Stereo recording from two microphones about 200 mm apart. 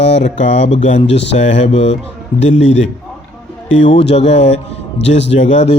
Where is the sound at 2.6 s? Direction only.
65° left (ahead or behind).